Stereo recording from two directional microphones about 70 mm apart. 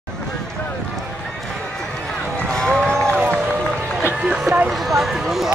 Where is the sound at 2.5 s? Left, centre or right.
Centre.